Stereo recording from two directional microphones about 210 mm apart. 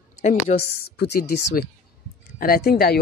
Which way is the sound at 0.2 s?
35° left (ahead or behind).